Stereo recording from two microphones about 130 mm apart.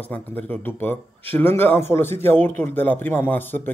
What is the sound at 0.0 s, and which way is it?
A man's voice, 15° left (ahead or behind).